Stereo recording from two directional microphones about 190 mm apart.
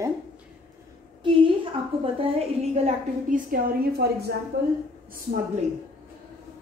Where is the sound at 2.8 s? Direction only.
45° right (ahead or behind).